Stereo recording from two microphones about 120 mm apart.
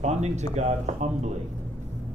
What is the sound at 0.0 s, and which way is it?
A man's voice, 70° right (ahead or behind).